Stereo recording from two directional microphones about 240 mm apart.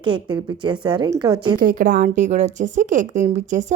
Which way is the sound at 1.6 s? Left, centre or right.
Right.